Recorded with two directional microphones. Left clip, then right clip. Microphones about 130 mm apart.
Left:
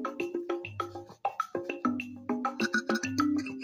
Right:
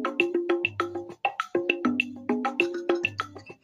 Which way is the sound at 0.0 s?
25° right (ahead or behind).